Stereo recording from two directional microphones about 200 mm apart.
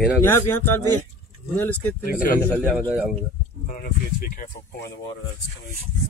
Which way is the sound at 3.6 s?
45° left (ahead or behind).